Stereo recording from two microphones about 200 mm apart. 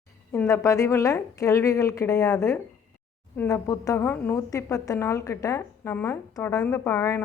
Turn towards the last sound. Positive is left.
turn(degrees=15)  # may be behind; listen again after turning